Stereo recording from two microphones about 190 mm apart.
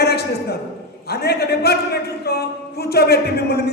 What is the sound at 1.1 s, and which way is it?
A man's voice, 55° left (ahead or behind).